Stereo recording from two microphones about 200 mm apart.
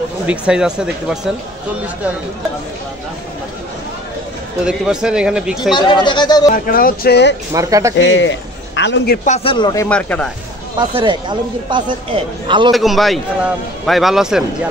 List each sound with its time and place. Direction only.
0.3 s a man's voice: 5° right (ahead or behind)
4.6 s a man's voice: 5° right (ahead or behind)
5.7 s speech: 25° left (ahead or behind)
6.5 s speech: 45° left (ahead or behind)
7.5 s speech: 15° right (ahead or behind)
8.0 s a man's voice: 65° left (ahead or behind); by 9.3 s 50° left (ahead or behind)
9.3 s speech: 25° left (ahead or behind)
9.8 s a man's voice: 5° left (ahead or behind)
10.8 s speech: 25° right (ahead or behind)
12.7 s a man's voice: centre (ahead or behind)